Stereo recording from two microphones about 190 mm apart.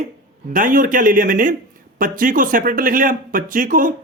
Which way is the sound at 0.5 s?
45° right (ahead or behind).